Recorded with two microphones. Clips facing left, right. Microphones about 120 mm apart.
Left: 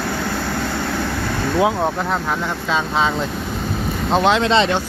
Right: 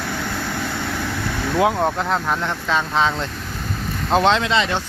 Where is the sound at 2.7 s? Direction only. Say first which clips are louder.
Even; 15° left (ahead or behind).